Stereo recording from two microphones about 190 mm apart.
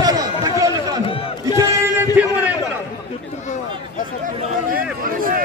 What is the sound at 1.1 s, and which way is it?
Music, 30° left (ahead or behind).